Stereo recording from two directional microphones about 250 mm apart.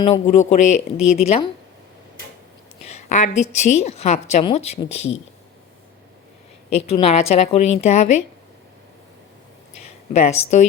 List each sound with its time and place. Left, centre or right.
0.0 s a woman's voice: left
0.9 s speech: left
1.2 s a woman's voice: left
2.9 s a sound: left
3.5 s a woman's voice: left
6.8 s a woman's voice: left
10.1 s a woman's voice: left